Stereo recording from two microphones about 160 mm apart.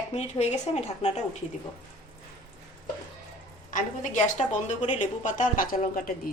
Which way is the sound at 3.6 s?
55° left (ahead or behind).